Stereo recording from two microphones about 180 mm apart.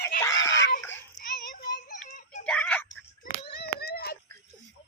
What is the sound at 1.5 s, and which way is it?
Music, 50° left (ahead or behind).